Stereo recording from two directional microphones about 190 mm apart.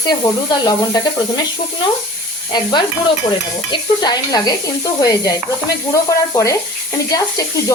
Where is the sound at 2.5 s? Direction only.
20° left (ahead or behind).